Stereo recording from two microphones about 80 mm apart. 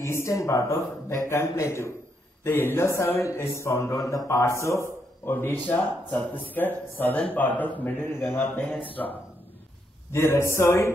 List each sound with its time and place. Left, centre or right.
0.0 s a man's voice: left
5.2 s speech: left
8.4 s speech: centre
8.8 s speech: left
10.1 s a man's voice: left